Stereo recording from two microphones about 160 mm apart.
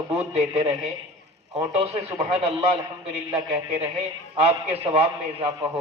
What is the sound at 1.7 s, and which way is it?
Speech, 45° right (ahead or behind).